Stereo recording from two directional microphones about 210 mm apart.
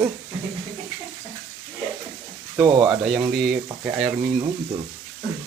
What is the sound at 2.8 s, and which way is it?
Speech, centre (ahead or behind).